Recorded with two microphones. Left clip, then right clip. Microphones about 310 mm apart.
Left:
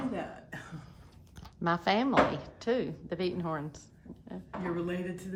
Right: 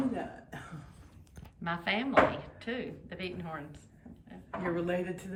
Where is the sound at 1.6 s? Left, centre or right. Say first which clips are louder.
Left 5 dB; centre.